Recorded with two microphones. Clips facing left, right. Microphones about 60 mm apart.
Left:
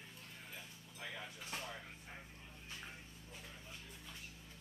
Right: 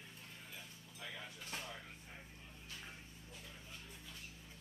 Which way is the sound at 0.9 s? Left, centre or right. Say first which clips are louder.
Left 2 dB; centre.